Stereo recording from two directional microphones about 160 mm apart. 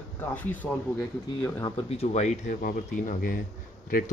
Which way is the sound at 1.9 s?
45° left (ahead or behind).